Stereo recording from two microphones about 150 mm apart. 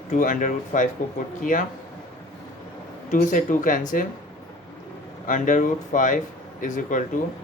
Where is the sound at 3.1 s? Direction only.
60° left (ahead or behind).